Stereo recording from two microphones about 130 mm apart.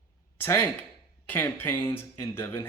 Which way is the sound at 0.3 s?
15° left (ahead or behind).